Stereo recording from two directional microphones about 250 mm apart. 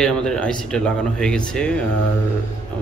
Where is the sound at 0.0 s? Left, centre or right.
Centre.